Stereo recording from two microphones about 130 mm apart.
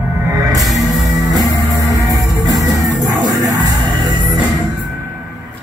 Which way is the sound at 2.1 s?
30° right (ahead or behind).